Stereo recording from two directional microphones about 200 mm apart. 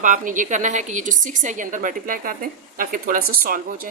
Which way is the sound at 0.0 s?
40° right (ahead or behind).